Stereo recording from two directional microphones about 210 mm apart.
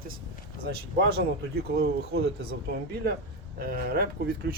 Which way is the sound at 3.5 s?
45° right (ahead or behind).